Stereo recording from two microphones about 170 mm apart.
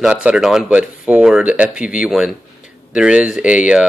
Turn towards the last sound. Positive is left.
turn(degrees=-5)  # may be behind; listen again after turning